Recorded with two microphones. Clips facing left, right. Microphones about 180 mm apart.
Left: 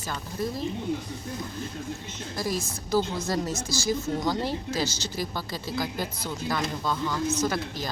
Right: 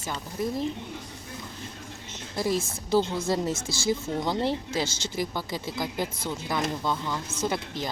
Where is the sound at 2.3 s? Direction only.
25° right (ahead or behind).